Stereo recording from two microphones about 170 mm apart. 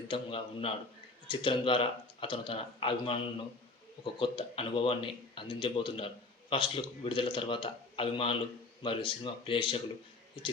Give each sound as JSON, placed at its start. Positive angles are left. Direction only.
{"t": 0.1, "sound": "speech", "side_deg": 30}